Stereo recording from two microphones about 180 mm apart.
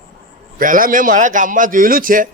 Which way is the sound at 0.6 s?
50° right (ahead or behind).